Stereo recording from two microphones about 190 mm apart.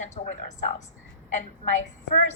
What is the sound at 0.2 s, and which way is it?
Speech, 30° left (ahead or behind).